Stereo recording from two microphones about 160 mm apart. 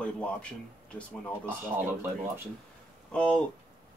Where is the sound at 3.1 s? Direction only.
10° left (ahead or behind).